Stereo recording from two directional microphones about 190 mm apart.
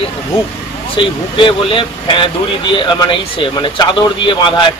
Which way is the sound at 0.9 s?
25° left (ahead or behind).